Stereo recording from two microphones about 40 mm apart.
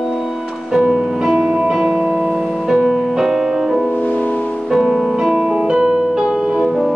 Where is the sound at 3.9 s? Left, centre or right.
Left.